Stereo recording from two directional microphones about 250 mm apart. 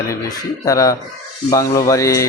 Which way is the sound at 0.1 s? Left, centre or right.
Centre.